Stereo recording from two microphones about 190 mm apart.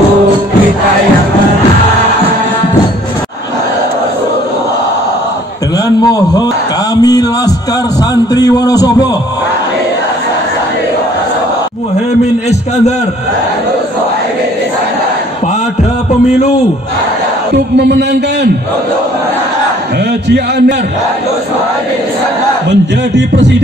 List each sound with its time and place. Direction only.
7.0 s a sound: 20° left (ahead or behind)
17.7 s a man's voice: 60° right (ahead or behind)
20.2 s a man's voice: 60° right (ahead or behind)
22.7 s speech: 70° right (ahead or behind)